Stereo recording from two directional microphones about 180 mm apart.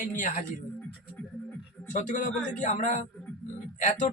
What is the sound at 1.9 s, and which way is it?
Speech, 45° left (ahead or behind).